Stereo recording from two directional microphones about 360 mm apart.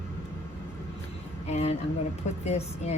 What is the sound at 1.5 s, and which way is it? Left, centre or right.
A woman's voice, centre.